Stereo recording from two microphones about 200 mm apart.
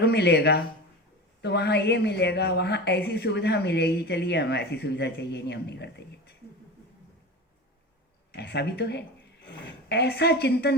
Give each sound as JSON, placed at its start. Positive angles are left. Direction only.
{"t": 0.0, "sound": "speech", "side_deg": 55}
{"t": 8.4, "sound": "speech", "side_deg": 55}